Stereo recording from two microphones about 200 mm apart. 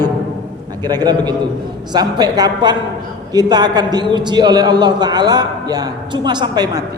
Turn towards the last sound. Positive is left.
turn(degrees=-20)  # may be behind; listen again after turning